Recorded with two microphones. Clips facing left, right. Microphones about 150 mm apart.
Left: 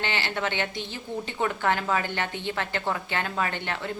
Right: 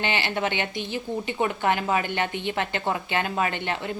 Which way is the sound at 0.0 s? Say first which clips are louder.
Right 3 dB; 15° right (ahead or behind).